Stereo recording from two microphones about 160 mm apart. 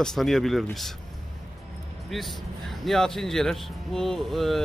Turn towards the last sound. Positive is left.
turn(degrees=0)  # may be behind; listen again after turning